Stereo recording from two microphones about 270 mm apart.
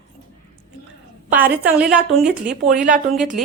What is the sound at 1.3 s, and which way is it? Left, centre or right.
Speech, centre.